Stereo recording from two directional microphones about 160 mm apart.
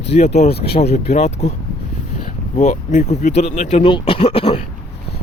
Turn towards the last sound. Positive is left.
turn(degrees=35)  # may be behind; listen again after turning